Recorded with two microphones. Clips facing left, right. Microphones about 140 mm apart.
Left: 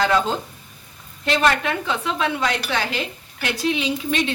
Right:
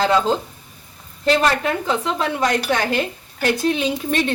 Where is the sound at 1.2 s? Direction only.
35° right (ahead or behind).